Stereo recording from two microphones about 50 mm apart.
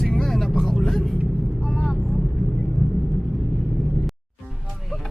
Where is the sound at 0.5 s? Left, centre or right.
Centre.